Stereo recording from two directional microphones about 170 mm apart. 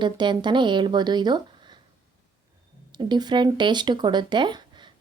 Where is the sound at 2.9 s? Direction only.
25° right (ahead or behind).